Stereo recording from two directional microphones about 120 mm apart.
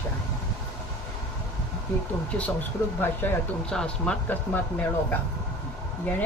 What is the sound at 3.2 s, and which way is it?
Speech, 15° left (ahead or behind).